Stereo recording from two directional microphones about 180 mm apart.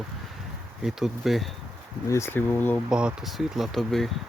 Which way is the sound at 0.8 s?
5° right (ahead or behind).